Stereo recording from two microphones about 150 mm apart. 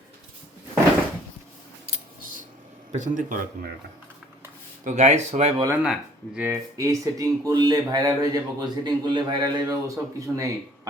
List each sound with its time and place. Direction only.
2.9 s speech: 60° right (ahead or behind)
4.9 s speech: 50° right (ahead or behind)
5.7 s speech: 5° right (ahead or behind)
6.5 s speech: 20° right (ahead or behind)